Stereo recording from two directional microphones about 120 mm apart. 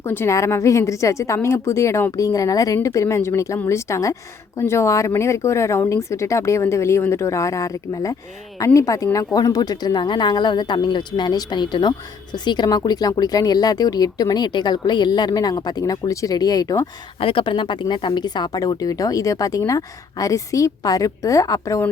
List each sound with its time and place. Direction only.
0.0 s a woman's voice: 20° left (ahead or behind)
17.2 s a woman's voice: 45° left (ahead or behind); by 21.8 s 30° left (ahead or behind)